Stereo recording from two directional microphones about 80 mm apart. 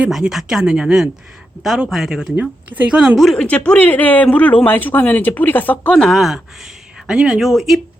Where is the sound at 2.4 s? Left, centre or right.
Centre.